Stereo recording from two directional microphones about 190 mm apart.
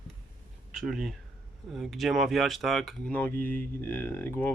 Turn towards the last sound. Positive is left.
turn(degrees=10)  # may be behind; listen again after turning